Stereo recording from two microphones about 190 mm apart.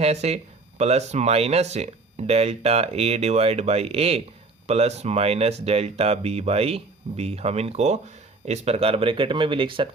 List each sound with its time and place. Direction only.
0.0 s speech: 35° right (ahead or behind)